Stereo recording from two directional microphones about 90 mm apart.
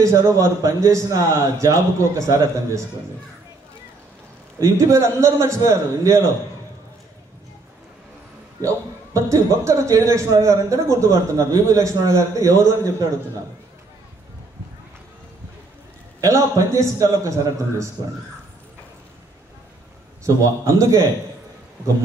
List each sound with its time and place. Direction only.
0.0 s a man's voice: 35° right (ahead or behind)
4.6 s a man's voice: 35° right (ahead or behind)
8.5 s a man's voice: 35° right (ahead or behind)
16.2 s a man's voice: 35° right (ahead or behind)
20.2 s a man's voice: 35° right (ahead or behind)